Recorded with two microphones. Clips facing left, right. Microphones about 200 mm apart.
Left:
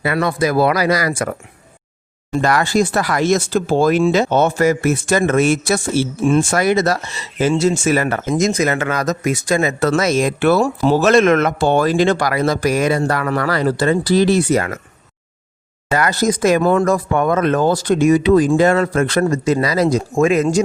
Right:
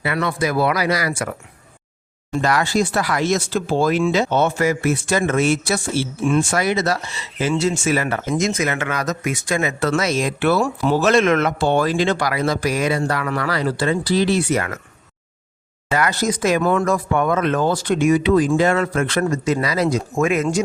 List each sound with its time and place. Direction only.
0.0 s speech: 40° left (ahead or behind)
2.4 s speech: 50° left (ahead or behind)
15.9 s speech: 40° left (ahead or behind)